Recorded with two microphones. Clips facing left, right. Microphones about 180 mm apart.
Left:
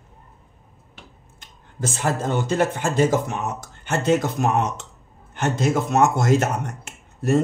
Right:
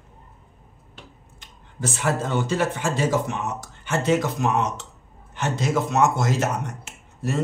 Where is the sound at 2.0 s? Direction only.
50° left (ahead or behind).